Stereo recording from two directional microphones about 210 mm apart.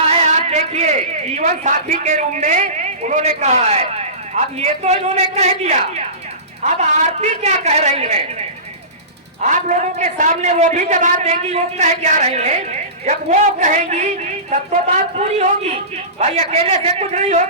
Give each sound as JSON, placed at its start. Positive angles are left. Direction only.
{"t": 0.2, "sound": "a man's voice", "side_deg": -30}